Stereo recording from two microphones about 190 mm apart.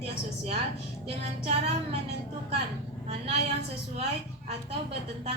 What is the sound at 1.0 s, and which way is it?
Speech, 30° right (ahead or behind).